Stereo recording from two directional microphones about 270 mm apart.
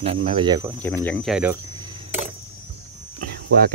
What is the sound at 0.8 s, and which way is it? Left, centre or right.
Speech, centre.